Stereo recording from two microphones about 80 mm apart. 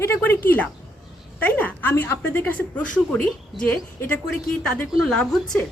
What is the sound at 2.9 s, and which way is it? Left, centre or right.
A woman's voice, centre.